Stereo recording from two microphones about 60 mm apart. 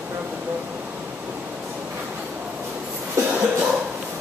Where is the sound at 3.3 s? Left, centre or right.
Right.